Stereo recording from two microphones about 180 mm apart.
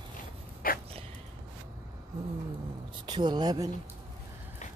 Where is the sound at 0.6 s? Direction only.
55° left (ahead or behind).